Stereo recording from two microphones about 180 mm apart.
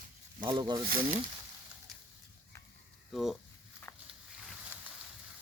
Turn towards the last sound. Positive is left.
turn(degrees=15)  # may be behind; listen again after turning